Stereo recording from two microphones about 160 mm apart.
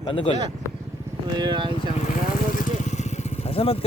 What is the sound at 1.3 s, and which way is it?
Speech, 30° right (ahead or behind).